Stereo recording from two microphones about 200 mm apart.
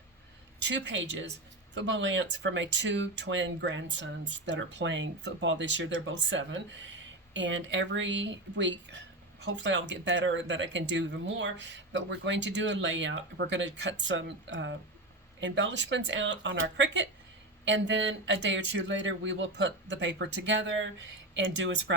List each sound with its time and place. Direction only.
0.6 s speech: 65° right (ahead or behind)